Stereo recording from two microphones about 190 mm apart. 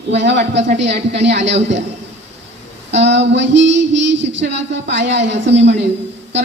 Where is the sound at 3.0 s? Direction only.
65° right (ahead or behind).